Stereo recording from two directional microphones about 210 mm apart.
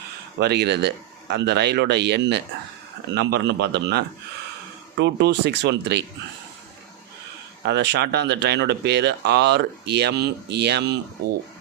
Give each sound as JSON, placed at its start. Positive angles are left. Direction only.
{"t": 0.3, "sound": "speech", "side_deg": -50}
{"t": 7.6, "sound": "speech", "side_deg": -55}